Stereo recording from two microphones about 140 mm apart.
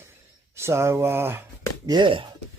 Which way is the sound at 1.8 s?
30° right (ahead or behind).